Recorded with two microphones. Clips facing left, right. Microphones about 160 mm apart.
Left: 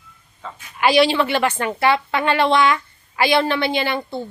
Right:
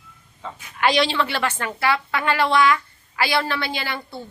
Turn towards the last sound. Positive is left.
turn(degrees=20)  # may be behind; listen again after turning